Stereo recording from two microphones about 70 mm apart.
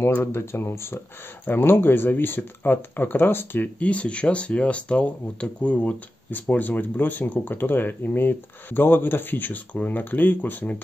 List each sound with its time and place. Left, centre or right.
0.2 s speech: left